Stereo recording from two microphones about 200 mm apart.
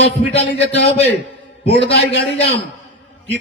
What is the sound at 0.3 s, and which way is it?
Speech, 30° left (ahead or behind).